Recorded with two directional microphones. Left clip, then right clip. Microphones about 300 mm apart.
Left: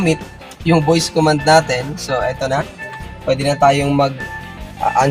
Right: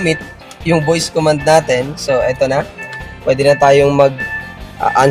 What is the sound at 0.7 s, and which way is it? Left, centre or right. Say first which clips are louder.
Speech: right 1 dB; right.